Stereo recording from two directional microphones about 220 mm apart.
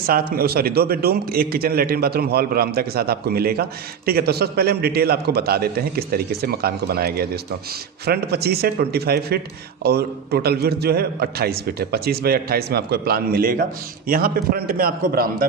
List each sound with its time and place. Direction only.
0.0 s a man's voice: 45° right (ahead or behind)